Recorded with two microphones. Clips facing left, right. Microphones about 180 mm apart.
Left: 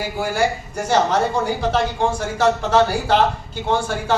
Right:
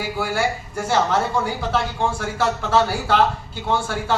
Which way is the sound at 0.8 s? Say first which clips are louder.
Left 2 dB; 15° left (ahead or behind).